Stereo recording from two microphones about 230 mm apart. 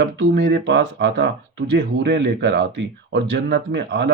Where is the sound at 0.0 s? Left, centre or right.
Right.